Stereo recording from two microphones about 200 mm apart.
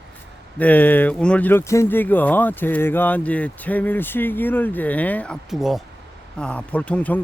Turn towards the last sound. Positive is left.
turn(degrees=5)  # may be behind; listen again after turning